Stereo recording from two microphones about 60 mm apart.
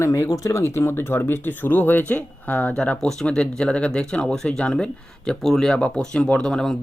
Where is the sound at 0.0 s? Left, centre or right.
Left.